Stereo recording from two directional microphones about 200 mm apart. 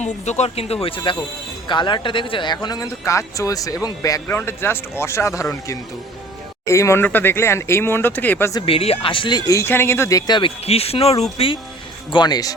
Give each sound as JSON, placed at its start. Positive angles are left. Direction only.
{"t": 0.0, "sound": "speech", "side_deg": 35}
{"t": 6.7, "sound": "speech", "side_deg": 15}
{"t": 8.6, "sound": "speech", "side_deg": 30}